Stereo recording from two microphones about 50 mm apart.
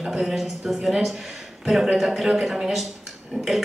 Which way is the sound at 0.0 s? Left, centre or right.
Centre.